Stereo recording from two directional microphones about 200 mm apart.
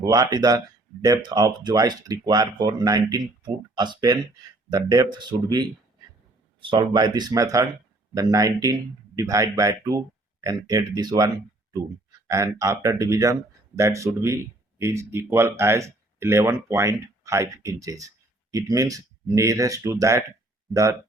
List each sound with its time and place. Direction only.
0.0 s speech: 20° right (ahead or behind)
12.3 s speech: 15° right (ahead or behind)